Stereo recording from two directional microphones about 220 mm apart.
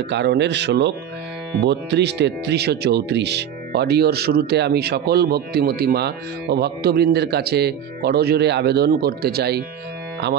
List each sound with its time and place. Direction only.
0.1 s speech: 50° right (ahead or behind)